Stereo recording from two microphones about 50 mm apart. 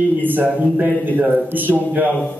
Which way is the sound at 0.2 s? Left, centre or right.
Right.